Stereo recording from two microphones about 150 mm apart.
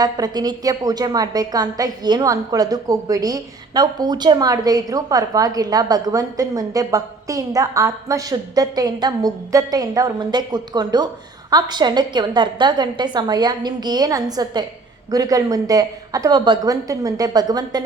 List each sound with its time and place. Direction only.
0.0 s a woman's voice: 25° right (ahead or behind)